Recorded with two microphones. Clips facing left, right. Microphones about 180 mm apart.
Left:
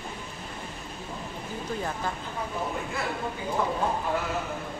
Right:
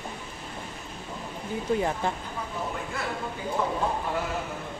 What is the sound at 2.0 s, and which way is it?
Speech, 25° right (ahead or behind).